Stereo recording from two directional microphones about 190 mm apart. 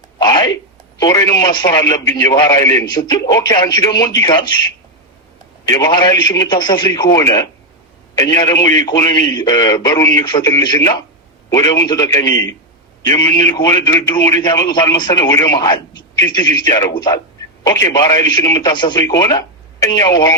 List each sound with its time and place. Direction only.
0.2 s a sound: 20° left (ahead or behind)
0.9 s speech: 20° left (ahead or behind)
5.6 s a man's voice: 20° left (ahead or behind)